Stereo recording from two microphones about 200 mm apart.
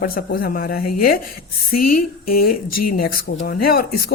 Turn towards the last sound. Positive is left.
turn(degrees=50)  # may be behind; listen again after turning